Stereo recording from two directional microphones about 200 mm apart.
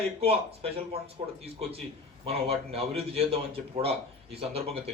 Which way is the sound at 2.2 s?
30° right (ahead or behind).